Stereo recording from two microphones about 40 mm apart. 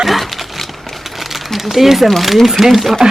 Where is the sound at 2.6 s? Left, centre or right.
Centre.